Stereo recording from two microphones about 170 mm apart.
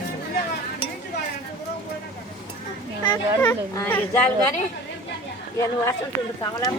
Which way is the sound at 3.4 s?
10° left (ahead or behind).